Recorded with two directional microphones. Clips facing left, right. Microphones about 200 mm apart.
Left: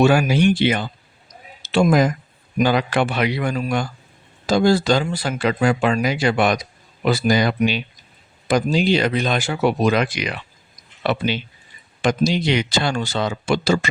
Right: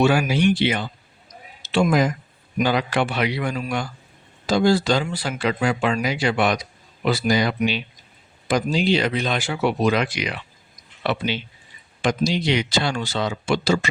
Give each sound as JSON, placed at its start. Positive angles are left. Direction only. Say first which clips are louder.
{"t": 0.0, "sound": "speech", "louder": "left 3 dB", "side_deg": 45}